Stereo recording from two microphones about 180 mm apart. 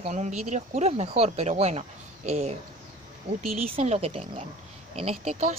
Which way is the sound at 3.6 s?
35° right (ahead or behind).